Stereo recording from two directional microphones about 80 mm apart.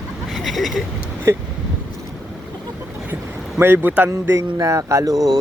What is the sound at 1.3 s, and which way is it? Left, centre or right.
Speech, right.